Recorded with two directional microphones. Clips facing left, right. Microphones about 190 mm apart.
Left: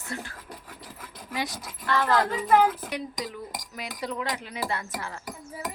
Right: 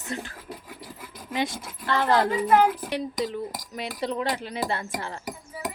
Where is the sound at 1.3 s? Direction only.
25° right (ahead or behind).